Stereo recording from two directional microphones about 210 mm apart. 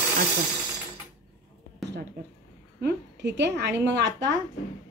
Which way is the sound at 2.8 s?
55° right (ahead or behind).